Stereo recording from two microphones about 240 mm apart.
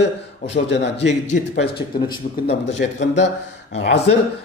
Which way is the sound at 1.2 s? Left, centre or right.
Left.